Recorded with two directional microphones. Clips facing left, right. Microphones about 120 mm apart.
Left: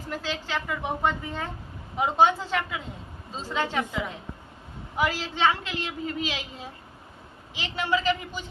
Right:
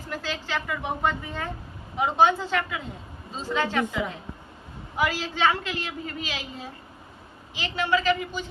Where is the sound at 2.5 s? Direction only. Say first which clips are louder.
Right 1 dB; 15° left (ahead or behind).